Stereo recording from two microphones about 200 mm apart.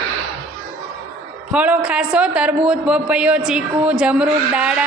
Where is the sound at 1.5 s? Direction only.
5° right (ahead or behind).